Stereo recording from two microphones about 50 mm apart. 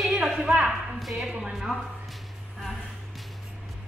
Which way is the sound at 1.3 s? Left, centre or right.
Centre.